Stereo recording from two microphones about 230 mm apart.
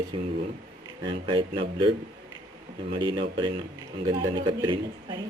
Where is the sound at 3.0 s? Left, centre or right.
Centre.